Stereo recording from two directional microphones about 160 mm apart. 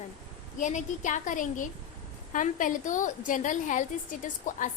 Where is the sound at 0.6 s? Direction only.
50° left (ahead or behind).